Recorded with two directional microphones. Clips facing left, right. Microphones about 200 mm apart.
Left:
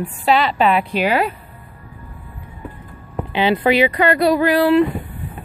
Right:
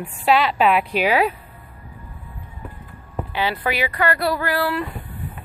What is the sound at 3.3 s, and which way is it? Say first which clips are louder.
Speech: left 8 dB; 20° left (ahead or behind).